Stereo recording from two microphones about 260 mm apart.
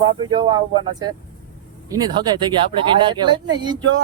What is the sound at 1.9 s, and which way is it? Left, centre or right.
Speech, centre.